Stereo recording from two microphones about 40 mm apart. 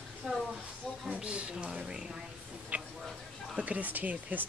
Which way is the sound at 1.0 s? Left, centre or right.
Right.